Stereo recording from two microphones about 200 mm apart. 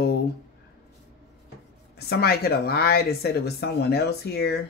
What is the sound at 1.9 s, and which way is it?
Speech, 55° left (ahead or behind).